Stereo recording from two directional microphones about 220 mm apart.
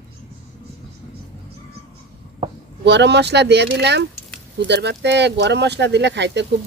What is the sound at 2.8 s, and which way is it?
Speech, 50° right (ahead or behind).